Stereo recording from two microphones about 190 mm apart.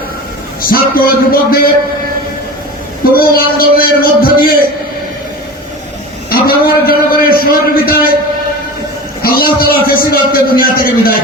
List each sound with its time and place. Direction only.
0.7 s a man's voice: 50° left (ahead or behind)
3.2 s a man's voice: 50° left (ahead or behind)
6.3 s a sound: 50° left (ahead or behind)
9.2 s a man's voice: 50° left (ahead or behind)